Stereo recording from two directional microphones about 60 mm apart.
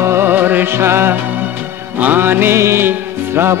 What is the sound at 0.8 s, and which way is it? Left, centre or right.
Music, right.